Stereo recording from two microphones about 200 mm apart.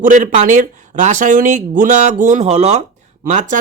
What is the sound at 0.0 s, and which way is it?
Speech, 40° right (ahead or behind).